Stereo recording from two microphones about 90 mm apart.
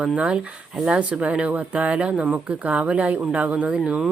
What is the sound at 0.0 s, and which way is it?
Speech, 10° right (ahead or behind).